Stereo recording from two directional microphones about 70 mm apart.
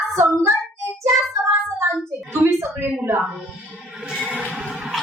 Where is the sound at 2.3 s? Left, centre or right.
Right.